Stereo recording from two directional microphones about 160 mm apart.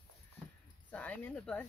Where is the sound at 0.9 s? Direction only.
10° left (ahead or behind).